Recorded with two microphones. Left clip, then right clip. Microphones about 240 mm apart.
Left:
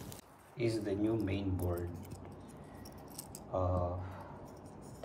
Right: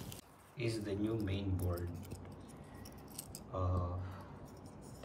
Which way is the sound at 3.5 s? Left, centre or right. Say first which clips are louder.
Left 6 dB; right.